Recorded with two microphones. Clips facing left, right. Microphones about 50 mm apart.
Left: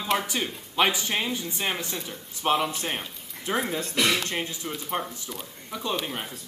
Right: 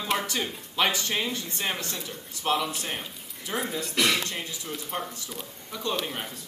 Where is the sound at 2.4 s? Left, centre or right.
Left.